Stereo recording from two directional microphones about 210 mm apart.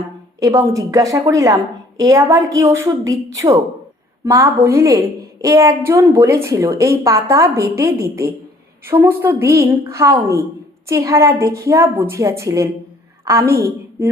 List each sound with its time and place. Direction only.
0.3 s a woman's voice: 15° right (ahead or behind)